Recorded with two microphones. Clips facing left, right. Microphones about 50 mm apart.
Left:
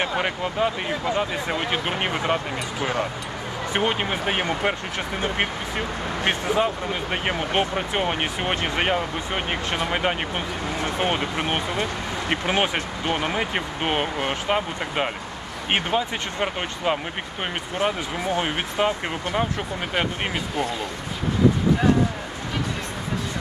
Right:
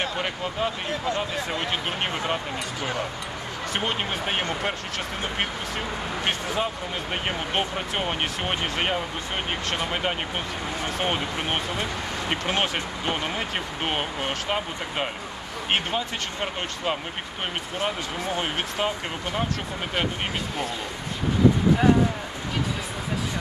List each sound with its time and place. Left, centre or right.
0.0 s speech: centre
3.7 s speech: centre
6.2 s speech: centre
12.4 s speech: centre
13.8 s speech: centre